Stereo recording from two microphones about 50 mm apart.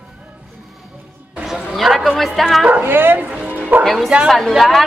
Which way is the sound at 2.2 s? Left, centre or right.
Centre.